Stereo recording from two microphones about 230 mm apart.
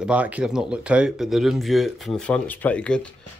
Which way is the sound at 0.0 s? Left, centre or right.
Centre.